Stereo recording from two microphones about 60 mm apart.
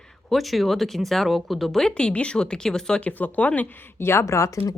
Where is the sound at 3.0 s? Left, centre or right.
Left.